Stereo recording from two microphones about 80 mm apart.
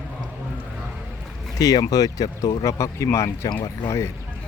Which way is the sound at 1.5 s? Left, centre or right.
Left.